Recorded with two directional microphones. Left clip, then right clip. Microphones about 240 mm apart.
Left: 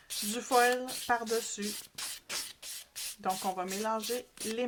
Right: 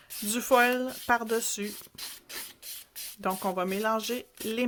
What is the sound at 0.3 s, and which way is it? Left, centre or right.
Speech, right.